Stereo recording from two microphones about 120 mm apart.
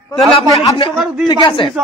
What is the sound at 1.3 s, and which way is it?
Speech, 40° left (ahead or behind).